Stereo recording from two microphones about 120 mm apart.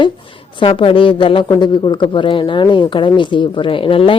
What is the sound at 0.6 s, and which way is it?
A woman's voice, 50° left (ahead or behind).